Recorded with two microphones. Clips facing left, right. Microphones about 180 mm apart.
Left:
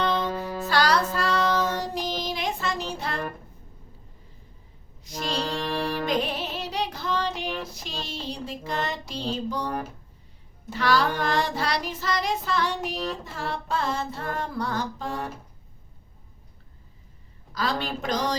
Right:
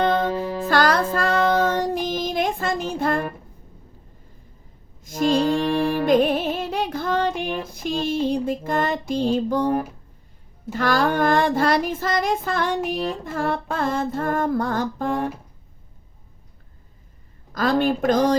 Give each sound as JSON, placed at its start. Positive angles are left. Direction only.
{"t": 0.0, "sound": "music", "side_deg": -50}
{"t": 0.7, "sound": "child singing", "side_deg": -50}
{"t": 5.0, "sound": "child singing", "side_deg": -50}
{"t": 6.1, "sound": "music", "side_deg": -50}
{"t": 10.7, "sound": "child singing", "side_deg": -50}
{"t": 17.5, "sound": "child singing", "side_deg": -50}